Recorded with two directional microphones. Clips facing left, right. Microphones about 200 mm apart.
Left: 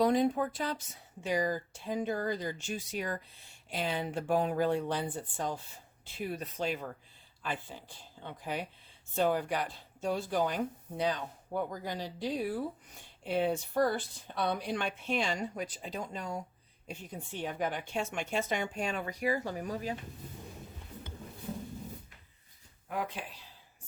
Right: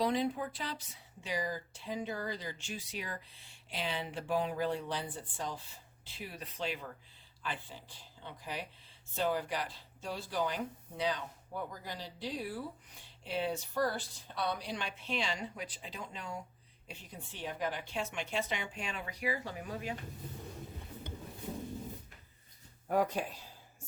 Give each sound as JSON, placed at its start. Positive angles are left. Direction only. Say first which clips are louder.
{"t": 0.0, "sound": "speech", "louder": "left 5 dB", "side_deg": 45}
{"t": 8.2, "sound": "speech", "louder": "left 5 dB", "side_deg": 50}
{"t": 17.4, "sound": "speech", "louder": "left 3 dB", "side_deg": 50}
{"t": 22.9, "sound": "speech", "louder": "right 6 dB", "side_deg": -40}